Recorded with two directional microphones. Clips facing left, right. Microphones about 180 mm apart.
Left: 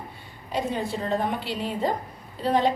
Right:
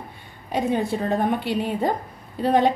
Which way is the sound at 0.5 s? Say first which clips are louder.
Right 5 dB; 55° right (ahead or behind).